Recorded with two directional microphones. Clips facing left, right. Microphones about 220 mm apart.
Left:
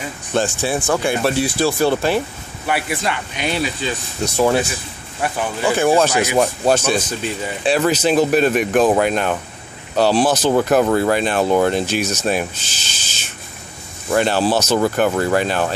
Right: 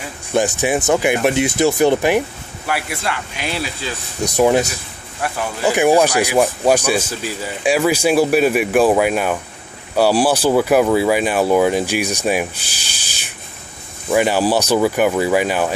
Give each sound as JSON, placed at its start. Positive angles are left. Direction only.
{"t": 0.3, "sound": "speech", "side_deg": -15}
{"t": 2.6, "sound": "speech", "side_deg": 0}
{"t": 4.2, "sound": "speech", "side_deg": -15}
{"t": 5.2, "sound": "speech", "side_deg": 0}
{"t": 5.7, "sound": "speech", "side_deg": -15}